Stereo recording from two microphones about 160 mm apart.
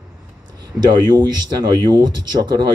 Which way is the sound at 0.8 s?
25° right (ahead or behind).